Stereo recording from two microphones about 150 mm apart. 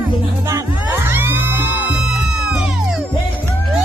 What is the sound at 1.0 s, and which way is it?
Music, 15° right (ahead or behind).